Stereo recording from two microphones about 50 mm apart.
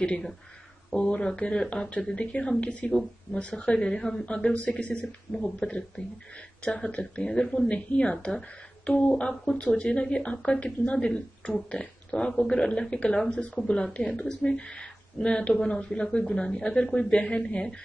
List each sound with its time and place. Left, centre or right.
0.8 s speech: left
2.9 s speech: centre
3.3 s speech: left
4.4 s speech: left
13.1 s speech: centre
13.9 s speech: left